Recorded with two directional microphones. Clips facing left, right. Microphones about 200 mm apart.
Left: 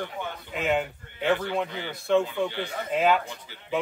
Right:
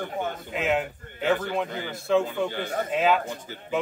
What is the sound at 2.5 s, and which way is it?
Speech, 50° right (ahead or behind).